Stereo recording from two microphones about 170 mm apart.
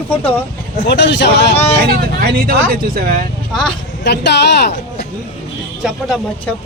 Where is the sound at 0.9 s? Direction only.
90° left.